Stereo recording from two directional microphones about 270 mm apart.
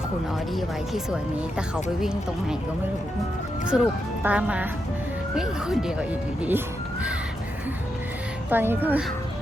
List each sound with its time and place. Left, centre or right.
0.5 s speech: centre
3.7 s speech: centre
8.4 s speech: centre